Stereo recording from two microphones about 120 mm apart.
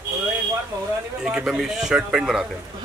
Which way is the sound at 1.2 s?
5° right (ahead or behind).